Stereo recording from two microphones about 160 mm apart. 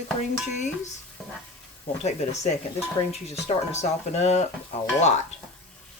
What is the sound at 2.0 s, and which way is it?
Speech, 45° left (ahead or behind).